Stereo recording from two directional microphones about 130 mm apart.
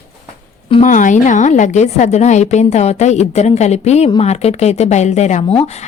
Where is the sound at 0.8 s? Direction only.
80° left.